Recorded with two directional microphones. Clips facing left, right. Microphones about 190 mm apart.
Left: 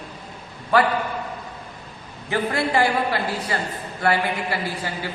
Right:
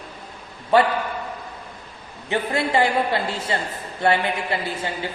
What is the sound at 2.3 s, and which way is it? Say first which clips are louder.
A man's voice: even; 20° right (ahead or behind).